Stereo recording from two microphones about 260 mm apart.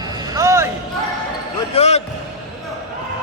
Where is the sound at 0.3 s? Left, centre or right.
Centre.